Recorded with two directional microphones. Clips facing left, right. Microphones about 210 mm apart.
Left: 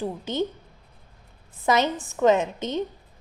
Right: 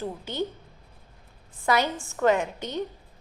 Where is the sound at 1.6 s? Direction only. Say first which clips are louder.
Left 2 dB; 20° left (ahead or behind).